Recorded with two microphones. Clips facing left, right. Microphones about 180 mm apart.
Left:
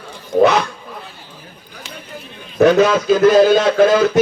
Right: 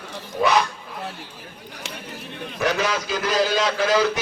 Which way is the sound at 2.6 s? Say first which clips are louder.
Left 12 dB; 55° left (ahead or behind).